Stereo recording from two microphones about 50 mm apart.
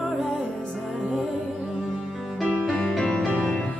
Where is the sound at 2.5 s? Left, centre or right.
Centre.